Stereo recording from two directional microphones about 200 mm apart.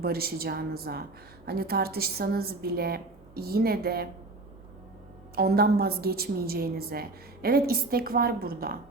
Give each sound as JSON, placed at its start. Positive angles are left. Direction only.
{"t": 0.0, "sound": "a woman's voice", "side_deg": -50}
{"t": 5.3, "sound": "a woman's voice", "side_deg": -50}